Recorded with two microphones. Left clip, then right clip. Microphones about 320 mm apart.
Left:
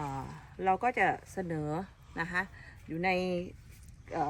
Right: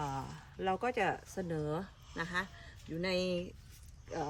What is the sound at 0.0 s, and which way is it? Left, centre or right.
Speech, centre.